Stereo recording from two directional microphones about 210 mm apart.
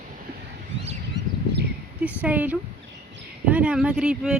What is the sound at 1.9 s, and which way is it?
Speech, 5° right (ahead or behind).